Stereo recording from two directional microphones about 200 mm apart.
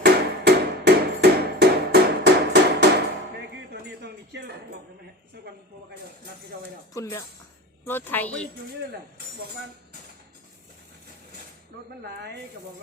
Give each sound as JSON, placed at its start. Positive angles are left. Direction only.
{"t": 0.0, "sound": "hammer", "side_deg": -55}
{"t": 3.7, "sound": "a sound", "side_deg": -55}
{"t": 6.9, "sound": "a woman's voice", "side_deg": 15}